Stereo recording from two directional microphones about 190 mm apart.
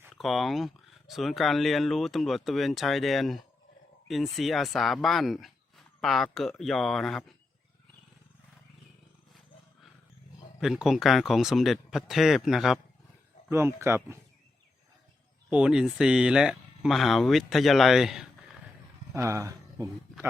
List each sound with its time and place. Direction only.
0.2 s speech: centre (ahead or behind)
10.6 s speech: centre (ahead or behind)
13.5 s speech: 15° right (ahead or behind)
15.4 s speech: 5° right (ahead or behind)
19.1 s speech: 15° right (ahead or behind)